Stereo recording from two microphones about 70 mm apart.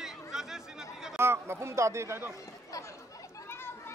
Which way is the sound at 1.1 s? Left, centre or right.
Right.